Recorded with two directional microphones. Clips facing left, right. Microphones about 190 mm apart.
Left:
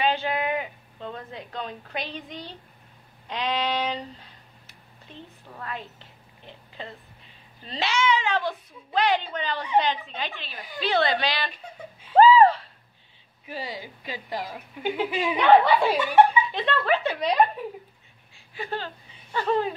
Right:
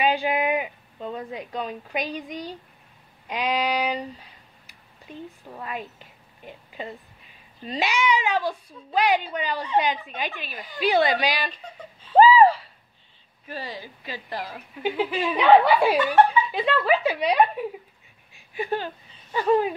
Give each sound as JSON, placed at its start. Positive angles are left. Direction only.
{"t": 0.0, "sound": "speech", "side_deg": -15}
{"t": 11.5, "sound": "speech", "side_deg": 10}
{"t": 12.2, "sound": "speech", "side_deg": -5}
{"t": 13.5, "sound": "speech", "side_deg": 15}
{"t": 15.3, "sound": "speech", "side_deg": -5}
{"t": 16.0, "sound": "speech", "side_deg": 10}
{"t": 16.5, "sound": "speech", "side_deg": -5}
{"t": 18.3, "sound": "a sound", "side_deg": -15}
{"t": 19.3, "sound": "speech", "side_deg": -10}